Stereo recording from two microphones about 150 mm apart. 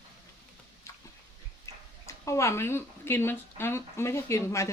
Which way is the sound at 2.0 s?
20° left (ahead or behind).